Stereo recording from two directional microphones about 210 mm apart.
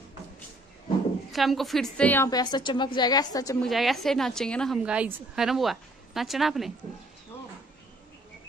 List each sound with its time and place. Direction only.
1.3 s a woman's voice: centre (ahead or behind); by 3.6 s 15° left (ahead or behind)
3.6 s a woman's voice: centre (ahead or behind)